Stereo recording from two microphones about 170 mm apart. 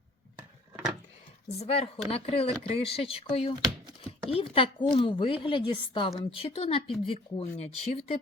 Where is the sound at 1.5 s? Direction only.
35° left (ahead or behind).